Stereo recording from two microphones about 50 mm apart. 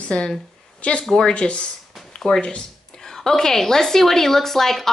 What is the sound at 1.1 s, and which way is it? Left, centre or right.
A woman's voice, centre.